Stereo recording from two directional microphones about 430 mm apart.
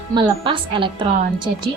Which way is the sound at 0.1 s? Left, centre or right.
Centre.